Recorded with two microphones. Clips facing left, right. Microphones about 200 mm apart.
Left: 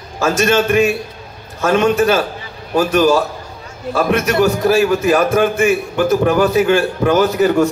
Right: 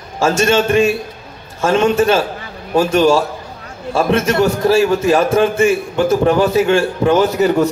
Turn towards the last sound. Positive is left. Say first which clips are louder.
# even
turn(degrees=-30)  # may be behind; listen again after turning